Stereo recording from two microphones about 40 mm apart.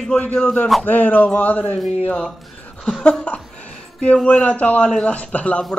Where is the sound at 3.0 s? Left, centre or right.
Left.